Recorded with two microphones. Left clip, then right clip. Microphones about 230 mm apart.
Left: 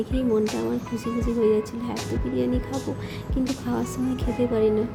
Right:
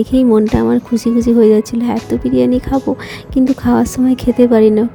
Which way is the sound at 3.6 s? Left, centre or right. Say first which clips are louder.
Right 14 dB; right.